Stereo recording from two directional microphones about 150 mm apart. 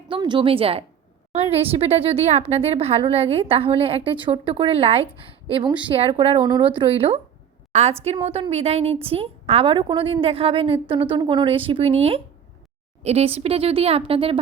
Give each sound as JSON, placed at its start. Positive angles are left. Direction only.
{"t": 0.1, "sound": "a woman's voice", "side_deg": -35}